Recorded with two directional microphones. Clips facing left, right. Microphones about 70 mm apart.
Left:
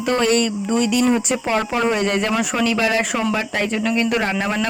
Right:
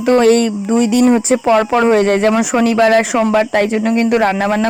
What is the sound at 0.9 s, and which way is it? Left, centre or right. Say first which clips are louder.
Speech: right 7 dB; right.